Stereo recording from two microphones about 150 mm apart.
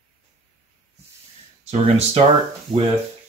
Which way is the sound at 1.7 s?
45° right (ahead or behind).